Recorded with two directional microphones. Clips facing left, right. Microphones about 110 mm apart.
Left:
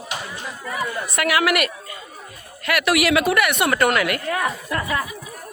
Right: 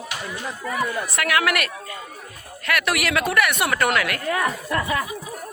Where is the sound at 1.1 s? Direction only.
5° left (ahead or behind).